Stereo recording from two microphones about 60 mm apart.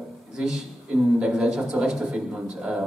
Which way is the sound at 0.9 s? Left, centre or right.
Centre.